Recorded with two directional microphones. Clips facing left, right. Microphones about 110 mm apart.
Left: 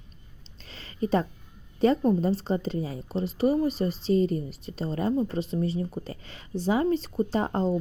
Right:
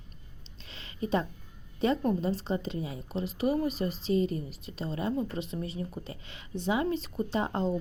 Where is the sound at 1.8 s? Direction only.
35° left (ahead or behind).